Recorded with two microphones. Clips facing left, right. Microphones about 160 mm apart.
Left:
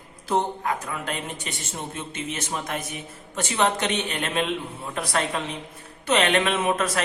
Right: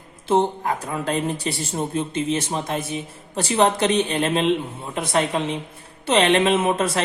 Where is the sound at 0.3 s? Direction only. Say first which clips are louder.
Right 5 dB; 30° right (ahead or behind).